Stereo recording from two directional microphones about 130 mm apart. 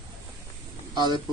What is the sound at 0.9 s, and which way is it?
Speech, 35° right (ahead or behind).